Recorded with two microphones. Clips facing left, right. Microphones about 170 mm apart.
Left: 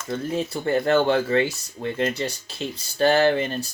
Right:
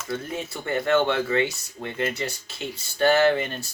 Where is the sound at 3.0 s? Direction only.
35° left (ahead or behind).